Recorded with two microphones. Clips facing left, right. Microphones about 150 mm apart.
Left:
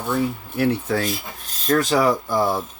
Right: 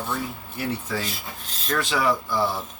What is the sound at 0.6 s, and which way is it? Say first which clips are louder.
Speech: left 8 dB; 60° left (ahead or behind).